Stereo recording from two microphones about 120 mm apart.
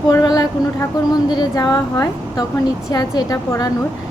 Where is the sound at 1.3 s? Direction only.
35° left (ahead or behind).